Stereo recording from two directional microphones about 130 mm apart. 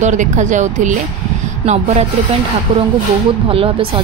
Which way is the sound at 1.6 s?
60° right (ahead or behind).